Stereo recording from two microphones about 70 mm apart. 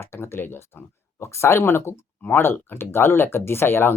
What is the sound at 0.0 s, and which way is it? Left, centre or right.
Speech, left.